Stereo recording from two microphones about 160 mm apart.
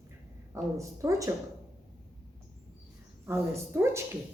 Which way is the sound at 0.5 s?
20° right (ahead or behind).